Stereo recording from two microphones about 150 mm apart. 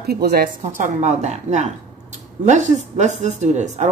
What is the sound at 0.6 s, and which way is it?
Speech, 50° right (ahead or behind).